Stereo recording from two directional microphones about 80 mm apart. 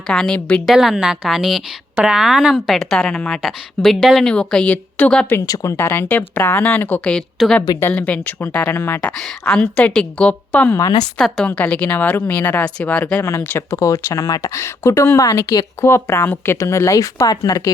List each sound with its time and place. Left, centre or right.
0.1 s a woman's voice: centre
0.6 s a woman's voice: centre
5.4 s speech: left
5.7 s speech: left
7.4 s speech: centre
7.8 s speech: left
9.0 s a woman's voice: centre
10.8 s speech: left
11.4 s speech: centre
13.2 s speech: left